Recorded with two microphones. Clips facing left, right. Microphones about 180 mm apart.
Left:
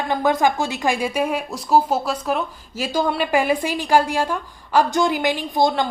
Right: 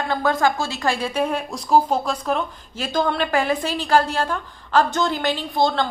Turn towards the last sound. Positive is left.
turn(degrees=15)  # may be behind; listen again after turning